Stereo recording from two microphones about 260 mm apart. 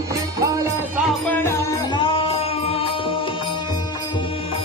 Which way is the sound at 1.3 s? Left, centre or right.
Centre.